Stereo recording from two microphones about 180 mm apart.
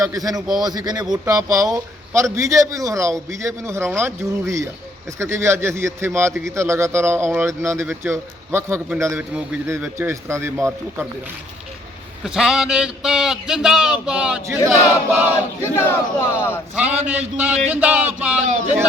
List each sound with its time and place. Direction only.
0.0 s speech: 20° right (ahead or behind)
12.2 s a man's voice: 5° right (ahead or behind)
15.6 s speech: 15° left (ahead or behind)
16.7 s speech: 10° right (ahead or behind)